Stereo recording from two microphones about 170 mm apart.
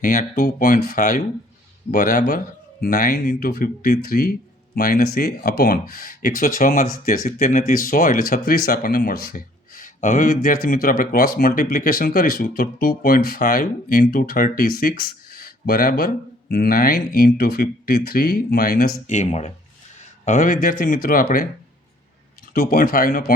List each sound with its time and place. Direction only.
0.0 s speech: 55° left (ahead or behind)
19.0 s speech: 45° left (ahead or behind)
22.5 s speech: 60° left (ahead or behind)